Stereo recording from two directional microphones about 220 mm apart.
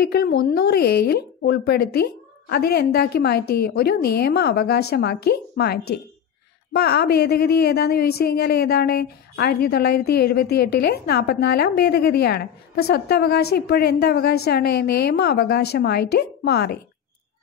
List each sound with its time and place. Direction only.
0.0 s speech: 45° left (ahead or behind)